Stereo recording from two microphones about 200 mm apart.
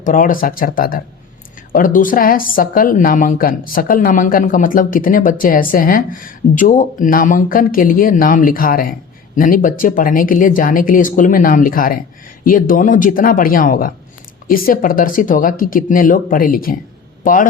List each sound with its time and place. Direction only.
0.0 s speech: 40° left (ahead or behind)